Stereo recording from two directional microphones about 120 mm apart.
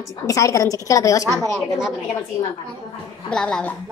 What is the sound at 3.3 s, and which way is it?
Speech, 5° left (ahead or behind).